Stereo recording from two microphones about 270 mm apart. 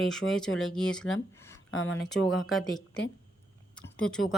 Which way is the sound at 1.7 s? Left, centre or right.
Left.